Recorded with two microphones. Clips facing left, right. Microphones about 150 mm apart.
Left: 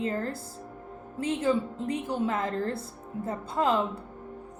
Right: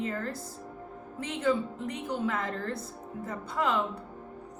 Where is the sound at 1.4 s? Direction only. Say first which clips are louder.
Right 1 dB; 25° left (ahead or behind).